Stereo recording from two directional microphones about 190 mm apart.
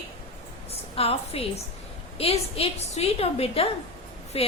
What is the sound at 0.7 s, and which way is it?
A woman's voice, 30° left (ahead or behind).